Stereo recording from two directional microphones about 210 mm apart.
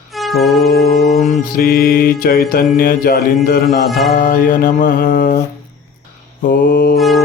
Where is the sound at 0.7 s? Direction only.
45° left (ahead or behind).